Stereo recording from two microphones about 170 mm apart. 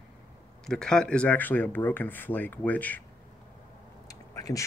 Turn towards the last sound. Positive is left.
turn(degrees=20)  # may be behind; listen again after turning